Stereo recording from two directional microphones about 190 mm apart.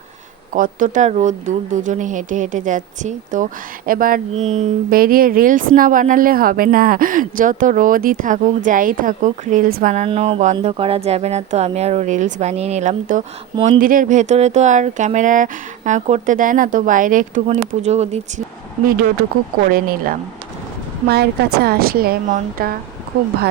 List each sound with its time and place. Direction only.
0.5 s speech: 45° right (ahead or behind)
9.9 s speech: 35° right (ahead or behind)
19.6 s speech: 50° right (ahead or behind)